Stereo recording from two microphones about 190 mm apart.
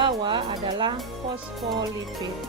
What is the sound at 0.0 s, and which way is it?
Speech, 25° right (ahead or behind).